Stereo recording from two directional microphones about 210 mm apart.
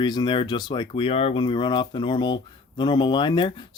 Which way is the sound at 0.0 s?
20° left (ahead or behind).